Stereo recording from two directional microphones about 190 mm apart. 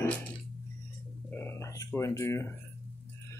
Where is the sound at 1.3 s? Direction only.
10° left (ahead or behind).